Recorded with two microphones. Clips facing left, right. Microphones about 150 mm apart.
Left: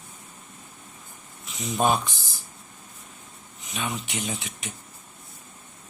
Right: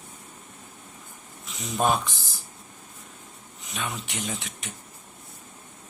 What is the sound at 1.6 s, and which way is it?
Speech, centre (ahead or behind).